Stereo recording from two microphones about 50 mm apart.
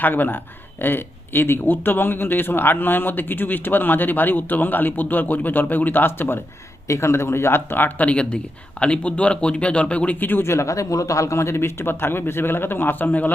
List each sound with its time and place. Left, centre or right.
0.0 s speech: left
6.8 s a man's voice: left
10.2 s speech: left
10.4 s a man's voice: left